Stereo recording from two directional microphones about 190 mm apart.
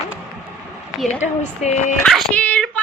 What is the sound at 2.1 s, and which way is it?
Child singing, 5° left (ahead or behind).